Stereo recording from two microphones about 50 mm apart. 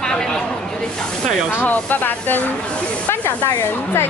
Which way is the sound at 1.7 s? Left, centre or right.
Left.